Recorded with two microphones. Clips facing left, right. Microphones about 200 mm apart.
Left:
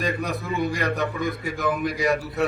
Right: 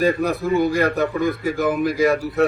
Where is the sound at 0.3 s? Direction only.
35° right (ahead or behind).